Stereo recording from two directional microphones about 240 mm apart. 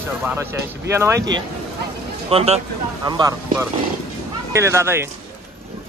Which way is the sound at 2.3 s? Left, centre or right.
Right.